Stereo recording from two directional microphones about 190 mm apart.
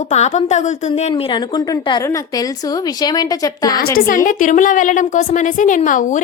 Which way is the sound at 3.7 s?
50° left (ahead or behind).